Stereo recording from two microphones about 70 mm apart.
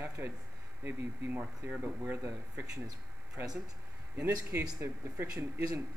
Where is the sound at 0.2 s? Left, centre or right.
Right.